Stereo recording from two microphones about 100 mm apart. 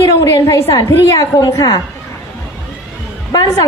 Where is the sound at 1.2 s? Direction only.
35° left (ahead or behind).